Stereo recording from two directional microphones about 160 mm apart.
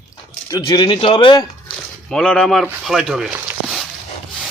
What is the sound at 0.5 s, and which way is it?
Speech, 30° left (ahead or behind).